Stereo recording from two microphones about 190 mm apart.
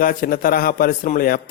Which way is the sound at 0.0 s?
50° left (ahead or behind).